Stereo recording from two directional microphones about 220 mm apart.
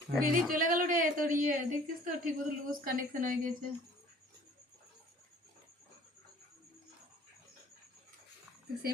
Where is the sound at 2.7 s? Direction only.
40° right (ahead or behind).